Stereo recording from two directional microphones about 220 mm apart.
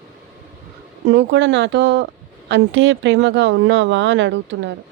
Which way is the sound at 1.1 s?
55° right (ahead or behind).